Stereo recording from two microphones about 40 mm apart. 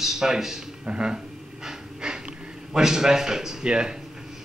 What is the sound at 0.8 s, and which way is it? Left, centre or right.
Speech, right.